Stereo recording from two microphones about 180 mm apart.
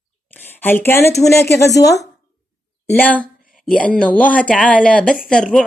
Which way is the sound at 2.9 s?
10° left (ahead or behind).